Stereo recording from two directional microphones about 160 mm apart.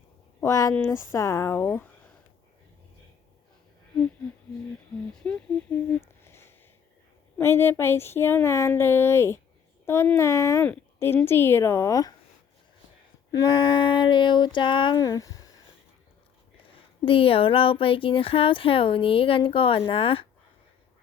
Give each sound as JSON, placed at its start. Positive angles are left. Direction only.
{"t": 0.4, "sound": "female singing", "side_deg": 20}
{"t": 0.9, "sound": "a woman's voice", "side_deg": 20}
{"t": 5.1, "sound": "a woman's voice", "side_deg": 5}
{"t": 13.3, "sound": "female singing", "side_deg": 30}
{"t": 16.7, "sound": "speech", "side_deg": 35}